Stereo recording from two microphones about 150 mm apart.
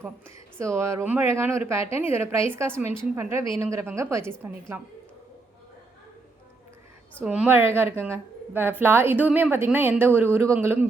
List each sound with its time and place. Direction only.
0.0 s a woman's voice: 15° right (ahead or behind)
7.2 s a woman's voice: 10° right (ahead or behind)